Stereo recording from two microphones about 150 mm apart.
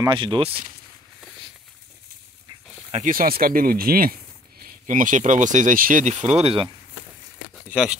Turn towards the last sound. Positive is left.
turn(degrees=-5)  # may be behind; listen again after turning